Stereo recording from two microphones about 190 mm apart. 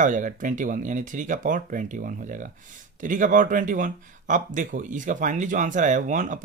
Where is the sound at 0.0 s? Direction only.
45° right (ahead or behind).